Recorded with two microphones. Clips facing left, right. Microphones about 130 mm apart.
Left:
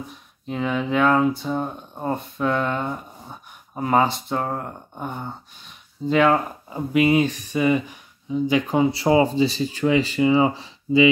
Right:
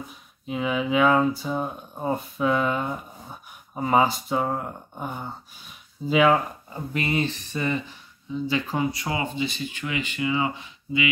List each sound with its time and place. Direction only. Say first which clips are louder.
0.1 s speech: left 1 dB; 5° right (ahead or behind)
6.7 s speech: left 9 dB; 10° left (ahead or behind); by 11.1 s 35° left (ahead or behind)